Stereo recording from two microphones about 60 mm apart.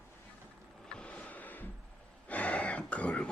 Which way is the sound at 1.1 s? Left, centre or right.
Left.